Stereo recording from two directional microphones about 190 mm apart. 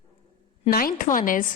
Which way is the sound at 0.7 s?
50° left (ahead or behind).